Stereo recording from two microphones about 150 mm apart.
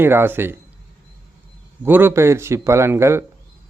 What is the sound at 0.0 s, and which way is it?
Speech, 15° right (ahead or behind).